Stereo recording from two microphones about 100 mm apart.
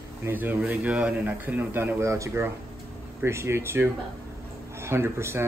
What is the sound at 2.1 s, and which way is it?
Speech, 30° right (ahead or behind).